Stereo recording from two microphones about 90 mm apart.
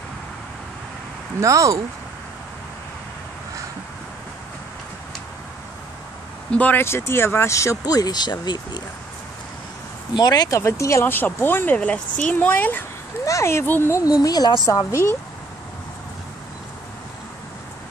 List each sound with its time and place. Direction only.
1.4 s speech: 35° right (ahead or behind)
6.5 s speech: 15° left (ahead or behind)
6.8 s speech: 30° left (ahead or behind); by 8.8 s 55° left (ahead or behind)
10.1 s speech: 50° left (ahead or behind)
10.6 s speech: 35° left (ahead or behind)
13.2 s speech: 35° left (ahead or behind)
14.2 s speech: 45° left (ahead or behind)